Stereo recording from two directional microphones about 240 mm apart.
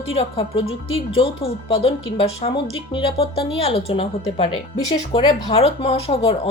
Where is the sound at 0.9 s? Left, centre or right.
Left.